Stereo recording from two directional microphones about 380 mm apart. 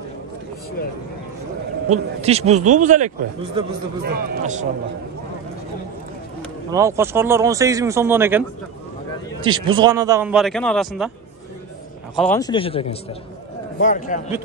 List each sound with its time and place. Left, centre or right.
1.9 s speech: centre
6.7 s speech: centre
12.2 s a man's voice: centre